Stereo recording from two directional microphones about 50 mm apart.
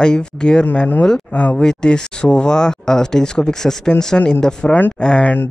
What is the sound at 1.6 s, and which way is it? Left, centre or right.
Speech, centre.